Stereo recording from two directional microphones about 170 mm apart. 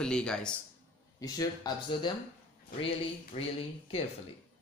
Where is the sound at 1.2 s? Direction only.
25° left (ahead or behind).